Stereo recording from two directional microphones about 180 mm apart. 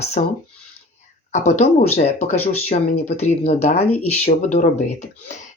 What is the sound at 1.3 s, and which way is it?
Speech, 40° left (ahead or behind).